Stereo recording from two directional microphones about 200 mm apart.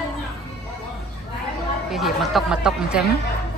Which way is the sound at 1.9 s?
Centre (ahead or behind).